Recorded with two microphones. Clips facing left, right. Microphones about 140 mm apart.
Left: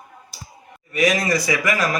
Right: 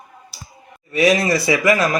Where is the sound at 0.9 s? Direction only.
30° right (ahead or behind).